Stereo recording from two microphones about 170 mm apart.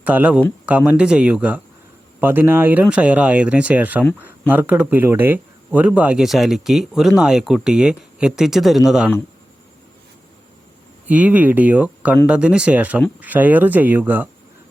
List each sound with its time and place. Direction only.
0.0 s speech: 10° right (ahead or behind)
11.1 s speech: 10° right (ahead or behind)